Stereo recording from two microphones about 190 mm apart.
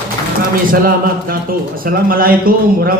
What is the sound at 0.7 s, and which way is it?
A man's voice, 50° right (ahead or behind).